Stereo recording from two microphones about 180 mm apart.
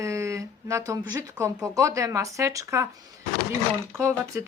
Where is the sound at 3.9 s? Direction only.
15° right (ahead or behind).